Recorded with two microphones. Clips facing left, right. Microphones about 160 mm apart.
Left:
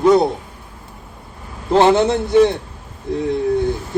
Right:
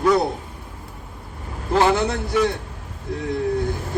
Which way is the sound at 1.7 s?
25° left (ahead or behind).